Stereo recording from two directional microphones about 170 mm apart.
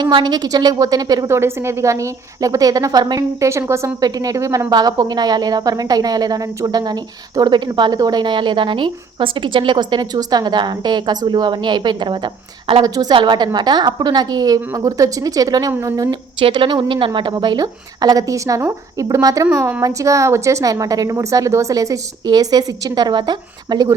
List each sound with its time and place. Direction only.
0.0 s a woman's voice: 25° right (ahead or behind)